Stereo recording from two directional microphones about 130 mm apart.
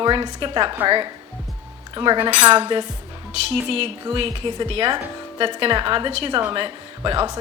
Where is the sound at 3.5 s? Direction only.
50° right (ahead or behind).